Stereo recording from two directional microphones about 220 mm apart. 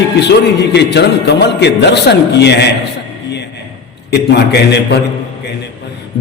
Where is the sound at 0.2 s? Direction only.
50° left (ahead or behind).